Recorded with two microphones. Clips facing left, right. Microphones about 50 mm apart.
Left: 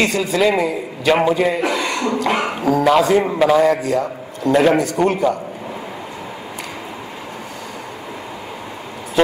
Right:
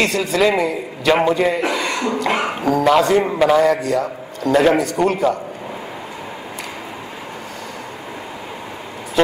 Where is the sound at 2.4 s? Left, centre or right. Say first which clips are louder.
Even; centre.